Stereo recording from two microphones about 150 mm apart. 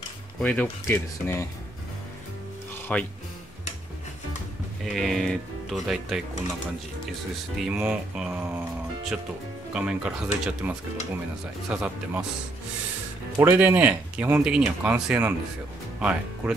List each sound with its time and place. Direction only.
0.4 s speech: 10° left (ahead or behind)
2.9 s speech: 5° left (ahead or behind)
4.8 s speech: centre (ahead or behind)
7.5 s speech: 5° right (ahead or behind)
9.8 s speech: 5° right (ahead or behind)
11.7 s speech: 5° right (ahead or behind)
13.4 s speech: 15° right (ahead or behind)